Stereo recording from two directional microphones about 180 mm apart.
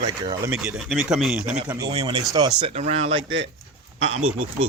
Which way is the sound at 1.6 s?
15° right (ahead or behind).